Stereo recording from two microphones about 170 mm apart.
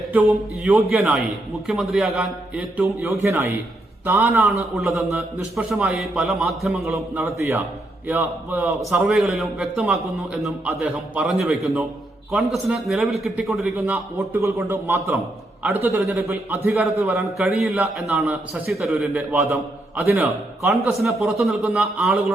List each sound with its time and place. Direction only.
0.1 s a man's voice: 10° right (ahead or behind)
2.8 s a man's voice: 15° right (ahead or behind)
4.7 s a man's voice: centre (ahead or behind)
7.3 s a man's voice: 15° right (ahead or behind)
8.9 s a man's voice: centre (ahead or behind)
13.9 s a man's voice: 15° right (ahead or behind)
17.0 s a man's voice: centre (ahead or behind)
21.0 s a man's voice: centre (ahead or behind)